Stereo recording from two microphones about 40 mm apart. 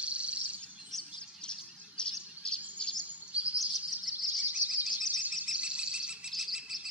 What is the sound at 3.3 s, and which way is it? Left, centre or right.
Bird vocalization, right.